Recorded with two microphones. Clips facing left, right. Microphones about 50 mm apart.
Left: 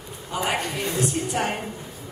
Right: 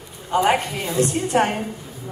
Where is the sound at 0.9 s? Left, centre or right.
Right.